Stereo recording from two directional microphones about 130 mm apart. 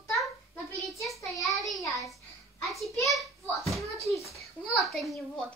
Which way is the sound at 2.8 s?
Centre (ahead or behind).